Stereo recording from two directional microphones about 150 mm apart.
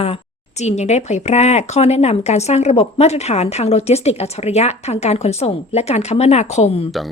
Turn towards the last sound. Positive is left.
turn(degrees=45)  # may be behind; listen again after turning